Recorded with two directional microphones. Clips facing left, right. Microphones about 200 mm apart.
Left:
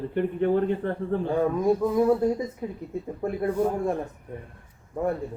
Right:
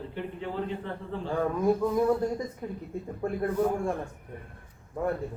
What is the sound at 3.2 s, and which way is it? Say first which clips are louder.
Speech: left 2 dB; 20° left (ahead or behind).